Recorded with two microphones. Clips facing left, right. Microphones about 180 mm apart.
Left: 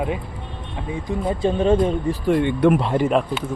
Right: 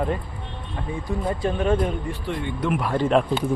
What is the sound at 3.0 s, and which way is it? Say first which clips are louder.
Speech: even; centre (ahead or behind).